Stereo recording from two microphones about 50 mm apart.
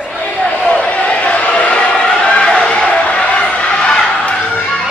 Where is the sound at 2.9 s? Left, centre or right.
Left.